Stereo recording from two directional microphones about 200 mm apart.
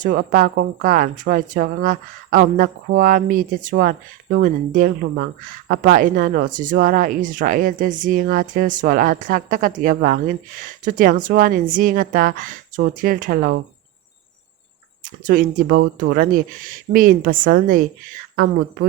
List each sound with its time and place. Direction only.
0.0 s a woman's voice: 45° right (ahead or behind)
15.2 s a woman's voice: 45° right (ahead or behind)